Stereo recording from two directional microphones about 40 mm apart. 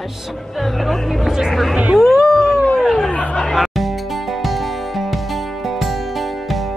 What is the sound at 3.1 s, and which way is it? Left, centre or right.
Chatter, left.